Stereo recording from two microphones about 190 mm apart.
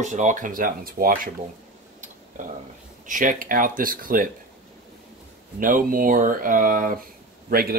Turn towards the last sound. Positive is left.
turn(degrees=-50)  # may be behind; listen again after turning